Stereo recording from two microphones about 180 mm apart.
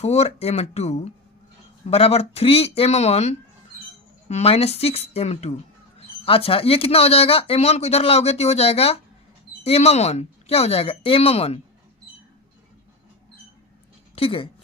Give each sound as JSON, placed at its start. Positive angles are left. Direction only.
{"t": 0.0, "sound": "speech", "side_deg": 35}
{"t": 14.2, "sound": "speech", "side_deg": 30}